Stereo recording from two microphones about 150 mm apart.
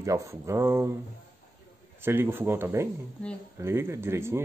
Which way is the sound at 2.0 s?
15° right (ahead or behind).